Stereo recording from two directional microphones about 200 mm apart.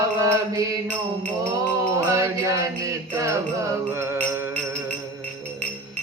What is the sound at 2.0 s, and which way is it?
Music, 15° right (ahead or behind).